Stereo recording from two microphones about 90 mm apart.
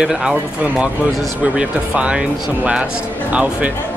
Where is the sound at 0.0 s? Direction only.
5° right (ahead or behind).